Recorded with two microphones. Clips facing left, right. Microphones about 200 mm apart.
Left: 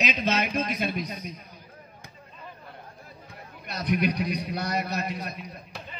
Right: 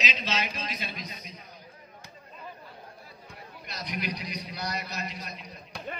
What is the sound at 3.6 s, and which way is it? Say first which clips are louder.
A man's voice: left 9 dB; 55° left (ahead or behind).